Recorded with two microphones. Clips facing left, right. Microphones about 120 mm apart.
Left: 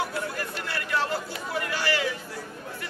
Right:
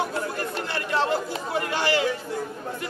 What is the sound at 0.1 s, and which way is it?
Chatter, 25° right (ahead or behind).